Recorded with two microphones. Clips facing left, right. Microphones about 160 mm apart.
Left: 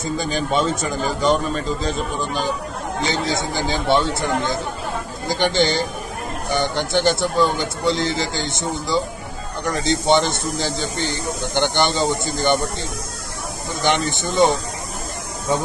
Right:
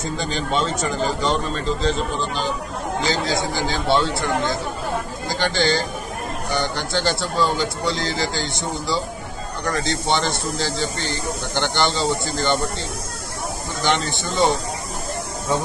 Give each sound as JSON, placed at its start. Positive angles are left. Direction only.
{"t": 0.0, "sound": "a man's voice", "side_deg": 10}
{"t": 3.0, "sound": "a man's voice", "side_deg": 20}
{"t": 13.8, "sound": "a man's voice", "side_deg": 20}